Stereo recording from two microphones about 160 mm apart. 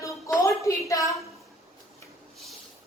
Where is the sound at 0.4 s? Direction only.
20° left (ahead or behind).